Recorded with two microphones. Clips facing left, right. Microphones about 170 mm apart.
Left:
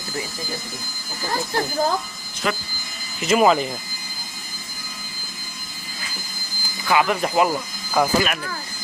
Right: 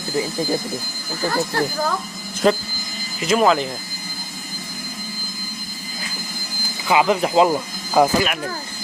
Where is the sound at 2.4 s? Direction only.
40° right (ahead or behind).